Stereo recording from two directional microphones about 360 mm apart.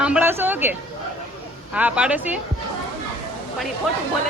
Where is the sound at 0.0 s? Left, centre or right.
Centre.